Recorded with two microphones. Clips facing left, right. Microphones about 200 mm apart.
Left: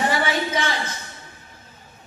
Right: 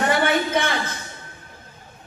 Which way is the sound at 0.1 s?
55° right (ahead or behind).